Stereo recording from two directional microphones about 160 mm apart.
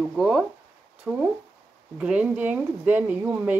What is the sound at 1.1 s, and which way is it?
Speech, 15° right (ahead or behind).